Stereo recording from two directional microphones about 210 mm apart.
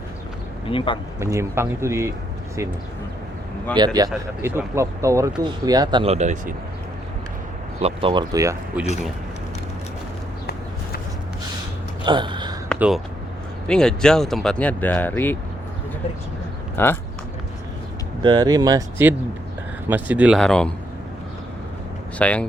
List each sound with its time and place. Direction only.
1.2 s speech: 15° right (ahead or behind)
3.8 s speech: 20° right (ahead or behind); by 6.5 s 35° right (ahead or behind)
7.8 s speech: 25° right (ahead or behind); by 8.9 s 10° right (ahead or behind)
12.0 s a sound: 20° right (ahead or behind)
13.7 s speech: 5° left (ahead or behind)
16.7 s speech: 10° left (ahead or behind)
18.2 s speech: 20° right (ahead or behind); by 20.7 s 5° left (ahead or behind)
22.2 s speech: 5° left (ahead or behind)